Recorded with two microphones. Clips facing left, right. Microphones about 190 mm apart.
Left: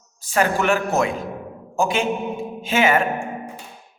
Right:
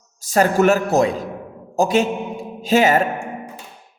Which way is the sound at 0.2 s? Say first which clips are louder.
Right 5 dB; 40° right (ahead or behind).